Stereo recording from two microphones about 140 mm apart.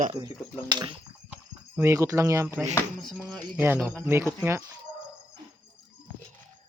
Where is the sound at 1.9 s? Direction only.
20° right (ahead or behind).